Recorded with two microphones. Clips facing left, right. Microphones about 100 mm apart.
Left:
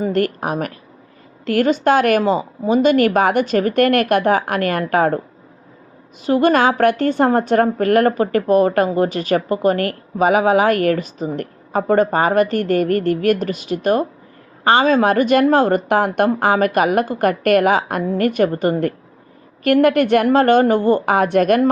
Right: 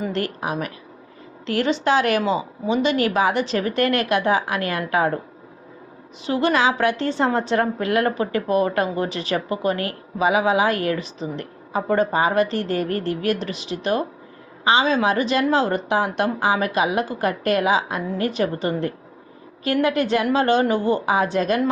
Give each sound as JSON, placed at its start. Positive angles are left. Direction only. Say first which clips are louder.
{"t": 0.0, "sound": "a woman's voice", "louder": "left 6 dB", "side_deg": 45}
{"t": 6.2, "sound": "a woman's voice", "louder": "left 5 dB", "side_deg": 45}